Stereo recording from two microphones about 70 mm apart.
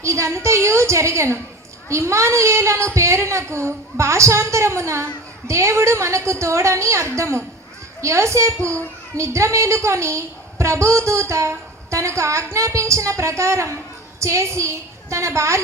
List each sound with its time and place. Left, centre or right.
0.0 s a woman's voice: right